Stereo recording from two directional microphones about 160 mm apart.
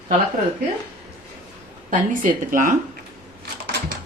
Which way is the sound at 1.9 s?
55° right (ahead or behind).